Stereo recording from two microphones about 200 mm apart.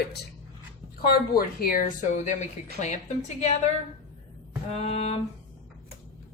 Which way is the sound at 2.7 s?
35° left (ahead or behind).